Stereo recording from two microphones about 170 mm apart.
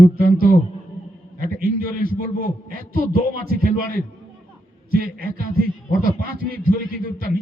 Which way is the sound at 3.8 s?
55° left (ahead or behind).